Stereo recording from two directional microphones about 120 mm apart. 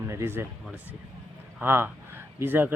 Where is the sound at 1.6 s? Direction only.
20° right (ahead or behind).